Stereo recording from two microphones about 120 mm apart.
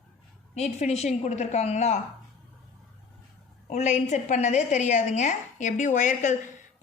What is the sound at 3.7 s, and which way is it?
A woman's voice, 75° left (ahead or behind).